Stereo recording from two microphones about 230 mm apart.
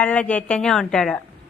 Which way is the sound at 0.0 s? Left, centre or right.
Centre.